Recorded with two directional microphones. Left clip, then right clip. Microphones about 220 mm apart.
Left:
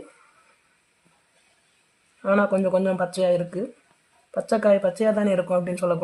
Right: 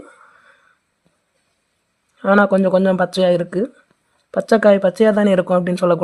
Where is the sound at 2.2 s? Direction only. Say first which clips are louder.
Right 7 dB; 40° right (ahead or behind).